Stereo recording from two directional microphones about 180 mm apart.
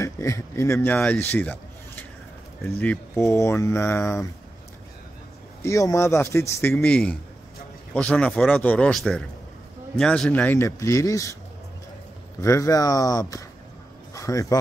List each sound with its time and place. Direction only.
0.0 s speech: 15° left (ahead or behind)
2.8 s speech: 10° left (ahead or behind)
5.6 s speech: 15° left (ahead or behind)
12.4 s speech: 20° left (ahead or behind)